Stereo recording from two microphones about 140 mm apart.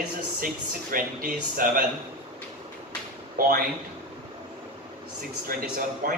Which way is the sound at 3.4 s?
90° right.